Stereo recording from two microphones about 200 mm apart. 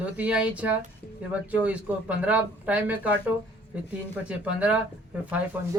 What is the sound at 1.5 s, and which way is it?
Speech, 5° right (ahead or behind).